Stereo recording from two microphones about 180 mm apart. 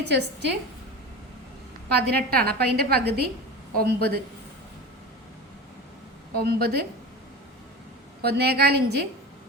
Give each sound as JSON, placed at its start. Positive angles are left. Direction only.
{"t": 0.1, "sound": "a woman's voice", "side_deg": -70}
{"t": 1.9, "sound": "a woman's voice", "side_deg": -60}
{"t": 6.4, "sound": "a woman's voice", "side_deg": -60}
{"t": 8.2, "sound": "a woman's voice", "side_deg": -60}